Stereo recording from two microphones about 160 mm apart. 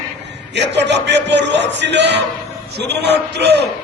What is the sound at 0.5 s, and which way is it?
Speech, 90° right.